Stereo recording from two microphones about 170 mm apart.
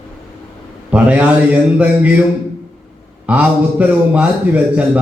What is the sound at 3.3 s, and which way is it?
A man's voice, 10° right (ahead or behind).